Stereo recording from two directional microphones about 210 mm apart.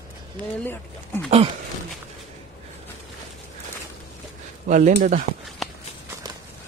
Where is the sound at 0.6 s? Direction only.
10° left (ahead or behind).